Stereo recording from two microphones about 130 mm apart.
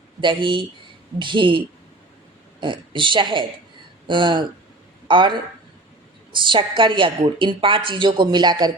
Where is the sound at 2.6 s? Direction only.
40° right (ahead or behind).